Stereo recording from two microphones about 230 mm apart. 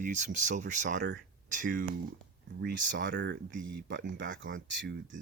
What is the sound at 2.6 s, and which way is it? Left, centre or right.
Speech, right.